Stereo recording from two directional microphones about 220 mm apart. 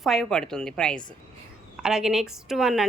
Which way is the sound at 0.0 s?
Centre (ahead or behind).